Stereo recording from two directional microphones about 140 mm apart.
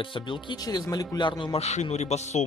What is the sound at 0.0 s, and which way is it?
Speech, 35° left (ahead or behind).